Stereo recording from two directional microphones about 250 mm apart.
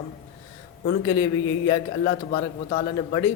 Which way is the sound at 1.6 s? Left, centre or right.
Centre.